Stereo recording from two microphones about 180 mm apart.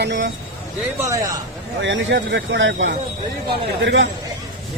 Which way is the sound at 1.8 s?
90° right.